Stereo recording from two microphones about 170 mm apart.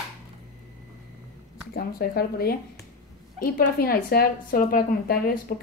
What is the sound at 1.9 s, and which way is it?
Speech, 60° left (ahead or behind).